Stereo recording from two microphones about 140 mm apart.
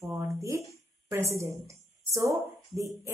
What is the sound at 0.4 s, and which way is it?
A woman's voice, 20° right (ahead or behind).